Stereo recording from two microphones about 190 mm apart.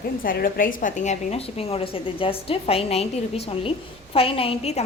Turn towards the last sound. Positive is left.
turn(degrees=30)  # may be behind; listen again after turning